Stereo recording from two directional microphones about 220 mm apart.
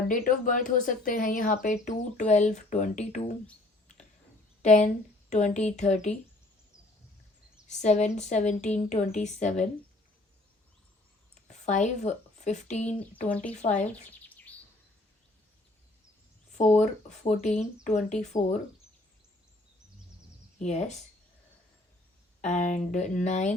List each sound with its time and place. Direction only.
0.1 s speech: 35° left (ahead or behind)
4.6 s speech: 35° left (ahead or behind)
7.7 s speech: 30° left (ahead or behind)
11.5 s speech: 30° left (ahead or behind)
13.0 s speech: 5° left (ahead or behind)
13.6 s speech: 30° left (ahead or behind)
14.1 s chirp: 5° left (ahead or behind)
16.7 s speech: 30° left (ahead or behind)
20.6 s speech: 30° left (ahead or behind)
22.4 s speech: 35° left (ahead or behind)